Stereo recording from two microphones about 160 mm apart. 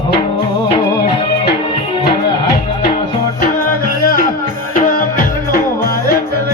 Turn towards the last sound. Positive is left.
turn(degrees=60)  # may be behind; listen again after turning